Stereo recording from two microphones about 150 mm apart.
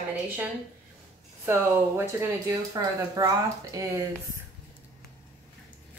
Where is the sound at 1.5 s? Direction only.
15° right (ahead or behind).